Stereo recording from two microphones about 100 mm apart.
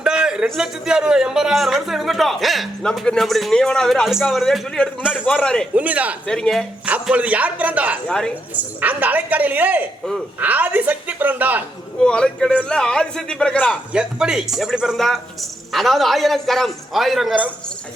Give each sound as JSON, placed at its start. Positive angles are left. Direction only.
{"t": 0.0, "sound": "a man's voice", "side_deg": -5}
{"t": 5.2, "sound": "a man's voice", "side_deg": 15}
{"t": 5.7, "sound": "a woman's voice", "side_deg": -15}
{"t": 6.2, "sound": "a man's voice", "side_deg": 10}
{"t": 7.1, "sound": "a woman's voice", "side_deg": -15}
{"t": 8.0, "sound": "a man's voice", "side_deg": 5}
{"t": 8.8, "sound": "a woman's voice", "side_deg": -15}
{"t": 11.9, "sound": "a man's voice", "side_deg": 10}
{"t": 13.9, "sound": "a man's voice", "side_deg": -5}